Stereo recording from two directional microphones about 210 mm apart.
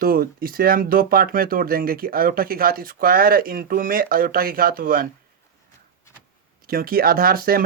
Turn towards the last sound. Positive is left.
turn(degrees=-45)  # may be behind; listen again after turning